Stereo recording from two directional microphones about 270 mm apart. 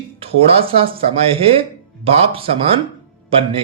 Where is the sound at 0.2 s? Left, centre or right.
Right.